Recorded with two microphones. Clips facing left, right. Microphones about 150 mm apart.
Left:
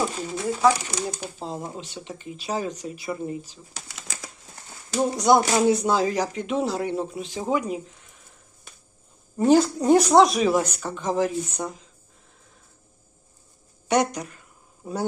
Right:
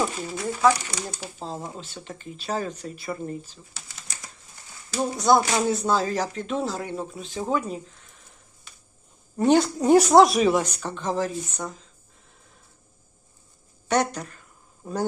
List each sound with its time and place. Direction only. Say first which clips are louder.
0.4 s speech: left 1 dB; 10° left (ahead or behind)
4.1 s crumpling: left 6 dB; 90° left
4.9 s speech: left 1 dB; 20° left (ahead or behind)
9.4 s speech: left 1 dB; centre (ahead or behind); by 11.7 s 20° left (ahead or behind)
13.8 s speech: left 1 dB; 15° left (ahead or behind)